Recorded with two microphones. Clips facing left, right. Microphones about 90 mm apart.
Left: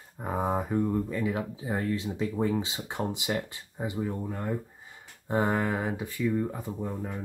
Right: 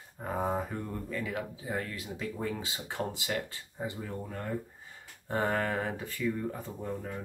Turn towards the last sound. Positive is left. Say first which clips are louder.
# left 3 dB
turn(degrees=15)  # may be behind; listen again after turning